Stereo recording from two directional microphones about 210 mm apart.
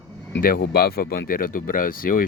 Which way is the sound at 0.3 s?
50° left (ahead or behind).